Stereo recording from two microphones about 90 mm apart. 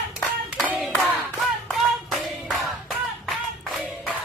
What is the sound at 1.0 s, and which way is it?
Clapping, 20° right (ahead or behind).